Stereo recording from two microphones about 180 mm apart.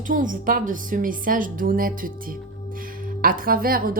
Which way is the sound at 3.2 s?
50° right (ahead or behind).